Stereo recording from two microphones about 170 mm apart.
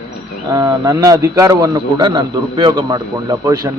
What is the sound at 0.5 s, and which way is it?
A man's voice, 20° right (ahead or behind).